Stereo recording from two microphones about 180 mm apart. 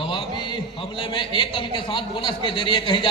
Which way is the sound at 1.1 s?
25° left (ahead or behind).